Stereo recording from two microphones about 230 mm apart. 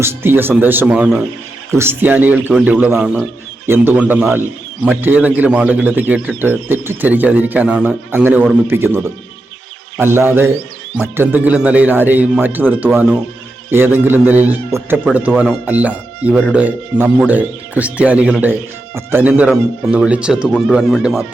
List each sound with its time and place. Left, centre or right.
0.0 s a man's voice: centre
10.0 s a man's voice: centre